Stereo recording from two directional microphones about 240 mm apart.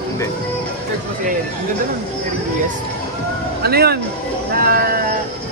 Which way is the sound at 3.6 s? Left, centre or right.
Right.